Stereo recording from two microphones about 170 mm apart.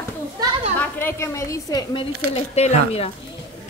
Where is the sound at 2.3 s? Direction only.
35° left (ahead or behind).